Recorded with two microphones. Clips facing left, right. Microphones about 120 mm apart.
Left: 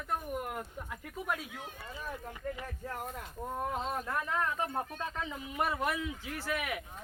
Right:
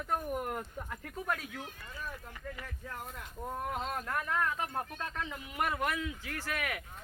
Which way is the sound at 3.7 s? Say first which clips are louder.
Left 1 dB; 20° left (ahead or behind).